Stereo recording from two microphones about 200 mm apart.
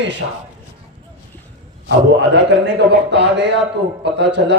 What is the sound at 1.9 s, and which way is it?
A man's voice, 60° right (ahead or behind).